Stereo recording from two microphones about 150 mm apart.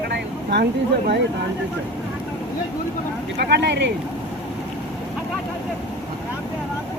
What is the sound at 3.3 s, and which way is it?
Speech, 90° right.